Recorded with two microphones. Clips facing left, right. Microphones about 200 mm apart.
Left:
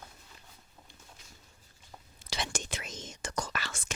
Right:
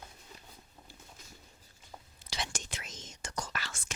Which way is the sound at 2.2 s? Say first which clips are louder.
Left 4 dB; 60° left (ahead or behind).